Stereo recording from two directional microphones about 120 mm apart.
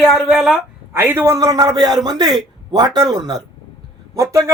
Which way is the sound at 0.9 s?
20° right (ahead or behind).